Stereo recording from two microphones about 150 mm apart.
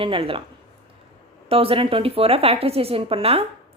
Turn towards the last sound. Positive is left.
turn(degrees=-40)  # may be behind; listen again after turning